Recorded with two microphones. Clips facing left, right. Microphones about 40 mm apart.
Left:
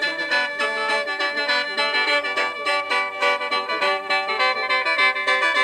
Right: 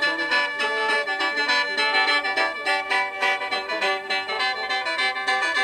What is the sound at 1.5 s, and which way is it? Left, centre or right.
Music, centre.